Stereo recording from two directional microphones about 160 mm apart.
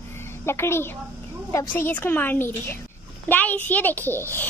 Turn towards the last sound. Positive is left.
turn(degrees=15)  # may be behind; listen again after turning